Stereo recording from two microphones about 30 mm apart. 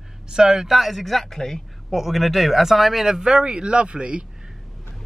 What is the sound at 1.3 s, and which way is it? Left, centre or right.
Speech, centre.